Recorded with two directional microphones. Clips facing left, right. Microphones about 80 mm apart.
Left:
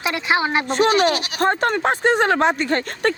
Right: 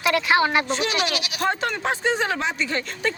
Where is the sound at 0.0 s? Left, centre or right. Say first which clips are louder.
Right 1 dB; left.